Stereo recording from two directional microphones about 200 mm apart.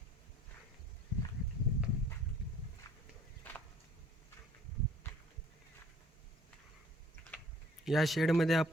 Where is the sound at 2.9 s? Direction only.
20° left (ahead or behind).